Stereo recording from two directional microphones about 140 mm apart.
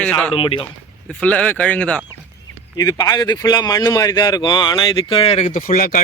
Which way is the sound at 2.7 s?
25° left (ahead or behind).